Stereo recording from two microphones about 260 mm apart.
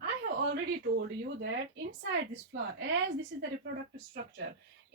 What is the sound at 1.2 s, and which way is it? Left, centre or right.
Speech, right.